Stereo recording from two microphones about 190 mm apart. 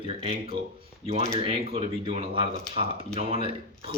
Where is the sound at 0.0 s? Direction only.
30° right (ahead or behind).